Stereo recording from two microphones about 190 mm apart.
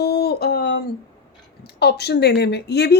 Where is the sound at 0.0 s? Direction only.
60° left (ahead or behind).